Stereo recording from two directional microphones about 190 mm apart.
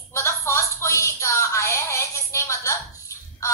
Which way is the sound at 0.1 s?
15° left (ahead or behind).